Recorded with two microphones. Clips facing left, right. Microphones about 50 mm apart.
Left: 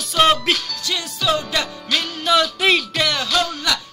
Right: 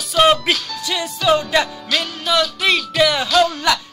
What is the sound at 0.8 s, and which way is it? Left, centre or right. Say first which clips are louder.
Music: right 4 dB; centre.